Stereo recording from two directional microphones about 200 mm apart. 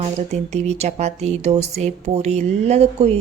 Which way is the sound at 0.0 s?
35° right (ahead or behind).